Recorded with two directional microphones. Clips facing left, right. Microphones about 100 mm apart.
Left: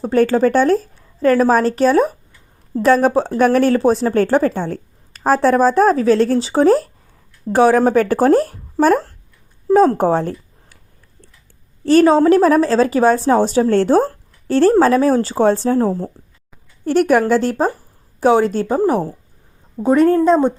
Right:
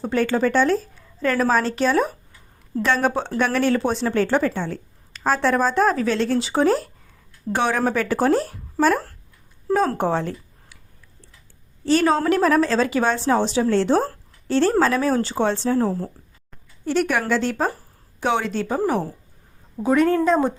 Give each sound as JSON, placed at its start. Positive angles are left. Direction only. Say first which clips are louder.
{"t": 0.0, "sound": "speech", "louder": "left 6 dB", "side_deg": 40}
{"t": 9.7, "sound": "speech", "louder": "left 8 dB", "side_deg": 35}
{"t": 12.0, "sound": "speech", "louder": "left 6 dB", "side_deg": 30}
{"t": 14.7, "sound": "speech", "louder": "left 9 dB", "side_deg": 35}
{"t": 16.8, "sound": "speech", "louder": "left 8 dB", "side_deg": 50}